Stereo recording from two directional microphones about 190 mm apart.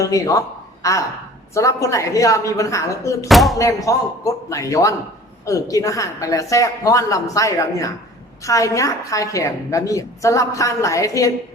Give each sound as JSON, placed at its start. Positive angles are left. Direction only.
{"t": 0.0, "sound": "a woman's voice", "side_deg": 15}
{"t": 3.2, "sound": "speech", "side_deg": 0}
{"t": 3.6, "sound": "a woman's voice", "side_deg": 15}